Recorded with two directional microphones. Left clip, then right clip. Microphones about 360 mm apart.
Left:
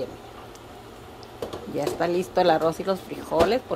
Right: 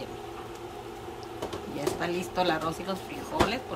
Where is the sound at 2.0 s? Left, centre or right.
Centre.